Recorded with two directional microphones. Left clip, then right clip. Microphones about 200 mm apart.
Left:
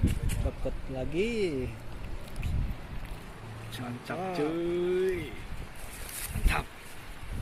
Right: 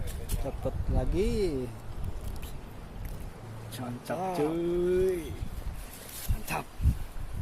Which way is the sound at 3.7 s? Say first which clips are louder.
Right 2 dB; 55° right (ahead or behind).